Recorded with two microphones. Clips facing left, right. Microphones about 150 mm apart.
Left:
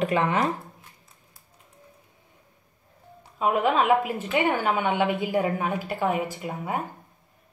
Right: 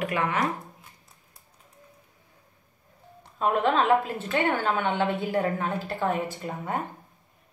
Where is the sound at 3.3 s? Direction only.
5° left (ahead or behind).